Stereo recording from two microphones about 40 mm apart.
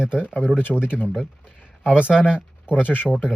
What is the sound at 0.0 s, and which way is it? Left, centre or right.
Speech, right.